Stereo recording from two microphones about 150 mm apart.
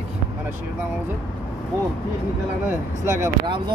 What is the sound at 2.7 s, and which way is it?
Speech, 20° right (ahead or behind).